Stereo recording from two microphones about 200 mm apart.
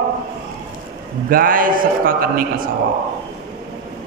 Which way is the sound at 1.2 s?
45° right (ahead or behind).